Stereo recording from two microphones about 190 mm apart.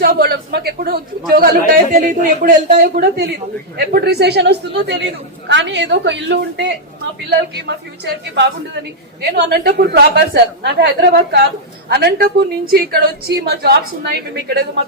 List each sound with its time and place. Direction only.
0.0 s a woman's voice: 50° right (ahead or behind)